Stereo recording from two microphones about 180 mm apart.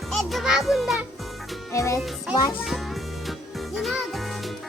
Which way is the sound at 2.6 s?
Centre (ahead or behind).